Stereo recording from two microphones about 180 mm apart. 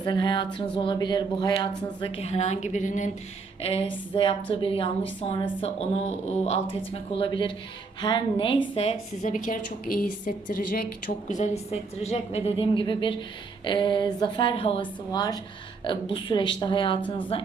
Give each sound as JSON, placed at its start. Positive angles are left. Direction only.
{"t": 0.0, "sound": "a woman's voice", "side_deg": 25}
{"t": 11.3, "sound": "a woman's voice", "side_deg": 40}